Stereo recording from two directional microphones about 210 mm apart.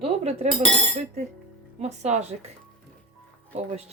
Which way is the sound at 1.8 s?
30° right (ahead or behind).